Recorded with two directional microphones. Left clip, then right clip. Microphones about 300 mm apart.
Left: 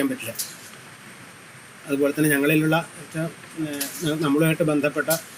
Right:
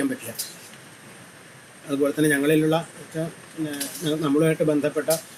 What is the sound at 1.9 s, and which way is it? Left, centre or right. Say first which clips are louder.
Speech: even; left.